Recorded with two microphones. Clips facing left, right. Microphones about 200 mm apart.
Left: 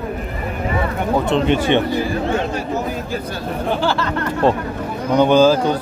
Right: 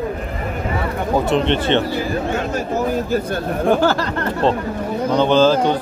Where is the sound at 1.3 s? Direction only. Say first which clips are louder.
Left 2 dB; 10° left (ahead or behind).